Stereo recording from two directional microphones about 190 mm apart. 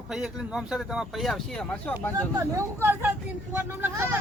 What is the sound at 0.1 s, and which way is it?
Speech, 5° right (ahead or behind).